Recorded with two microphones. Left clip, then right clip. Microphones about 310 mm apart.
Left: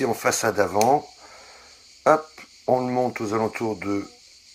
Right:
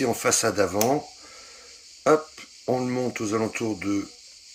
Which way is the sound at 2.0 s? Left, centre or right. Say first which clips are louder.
Left 2 dB; centre.